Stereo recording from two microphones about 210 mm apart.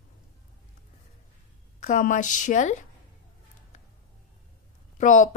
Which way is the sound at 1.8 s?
35° left (ahead or behind).